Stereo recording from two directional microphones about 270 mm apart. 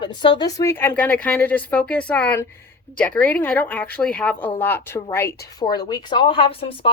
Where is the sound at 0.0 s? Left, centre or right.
Centre.